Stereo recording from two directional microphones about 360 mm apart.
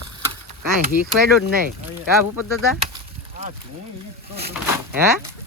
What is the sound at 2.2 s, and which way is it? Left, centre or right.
Chop, left.